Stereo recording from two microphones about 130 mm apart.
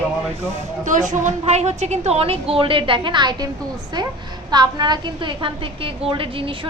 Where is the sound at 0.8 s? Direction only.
75° right (ahead or behind); by 3.5 s 35° right (ahead or behind).